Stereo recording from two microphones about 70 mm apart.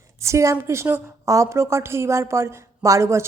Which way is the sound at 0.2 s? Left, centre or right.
Right.